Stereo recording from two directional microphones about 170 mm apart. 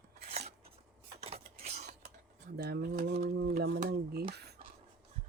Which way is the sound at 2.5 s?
70° right (ahead or behind).